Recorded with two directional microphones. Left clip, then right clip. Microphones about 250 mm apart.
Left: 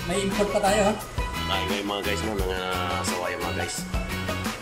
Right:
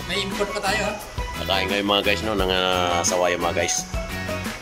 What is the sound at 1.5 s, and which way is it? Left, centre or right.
Speech, centre.